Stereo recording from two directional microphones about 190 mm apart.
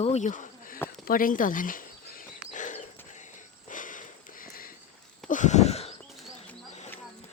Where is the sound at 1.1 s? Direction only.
45° left (ahead or behind).